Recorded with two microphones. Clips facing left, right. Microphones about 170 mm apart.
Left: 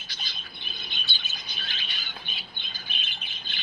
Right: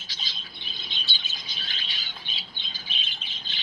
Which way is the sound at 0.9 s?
55° left (ahead or behind).